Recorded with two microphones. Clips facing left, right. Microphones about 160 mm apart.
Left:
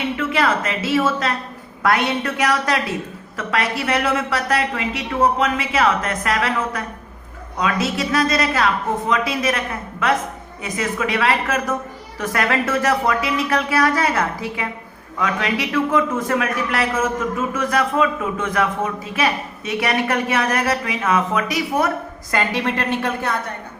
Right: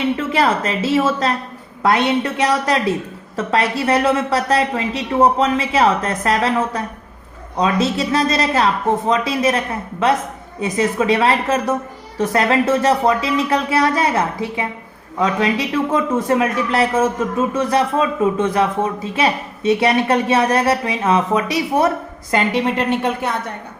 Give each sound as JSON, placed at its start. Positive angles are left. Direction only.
{"t": 0.2, "sound": "a woman's voice", "side_deg": -30}
{"t": 10.6, "sound": "a woman's voice", "side_deg": -30}